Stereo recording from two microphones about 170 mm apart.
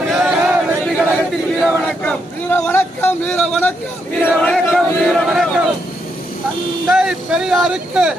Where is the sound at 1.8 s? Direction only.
10° left (ahead or behind).